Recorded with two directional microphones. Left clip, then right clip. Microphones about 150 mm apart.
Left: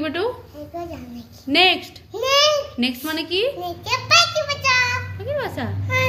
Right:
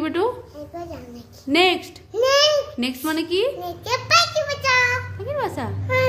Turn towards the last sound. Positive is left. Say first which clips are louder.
# right 1 dB
turn(degrees=-20)  # may be behind; listen again after turning